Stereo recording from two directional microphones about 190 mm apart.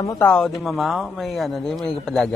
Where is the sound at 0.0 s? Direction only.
15° left (ahead or behind).